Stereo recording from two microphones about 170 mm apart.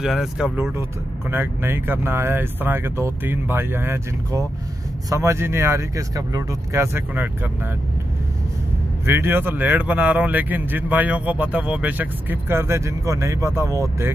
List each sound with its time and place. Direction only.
0.0 s a man's voice: centre (ahead or behind)
9.0 s a man's voice: 15° right (ahead or behind)